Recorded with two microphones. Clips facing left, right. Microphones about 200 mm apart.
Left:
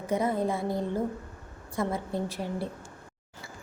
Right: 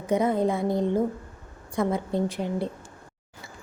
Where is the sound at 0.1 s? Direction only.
20° right (ahead or behind).